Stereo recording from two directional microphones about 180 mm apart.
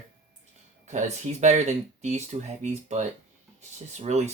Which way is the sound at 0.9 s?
40° right (ahead or behind).